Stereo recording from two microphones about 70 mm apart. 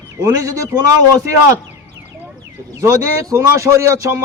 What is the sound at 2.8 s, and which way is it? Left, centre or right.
Speech, right.